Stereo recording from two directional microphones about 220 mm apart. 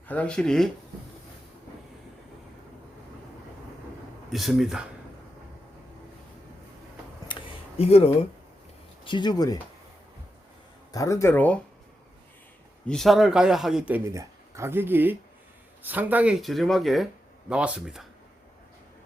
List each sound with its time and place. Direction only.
0.1 s speech: 5° left (ahead or behind)
4.3 s speech: centre (ahead or behind)
7.8 s speech: 25° left (ahead or behind)
10.9 s speech: 15° left (ahead or behind)
12.9 s speech: centre (ahead or behind)